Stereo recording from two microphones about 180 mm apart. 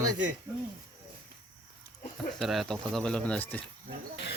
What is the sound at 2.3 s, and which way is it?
Speech, centre (ahead or behind).